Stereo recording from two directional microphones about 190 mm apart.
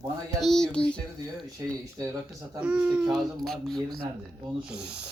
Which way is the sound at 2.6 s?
5° right (ahead or behind).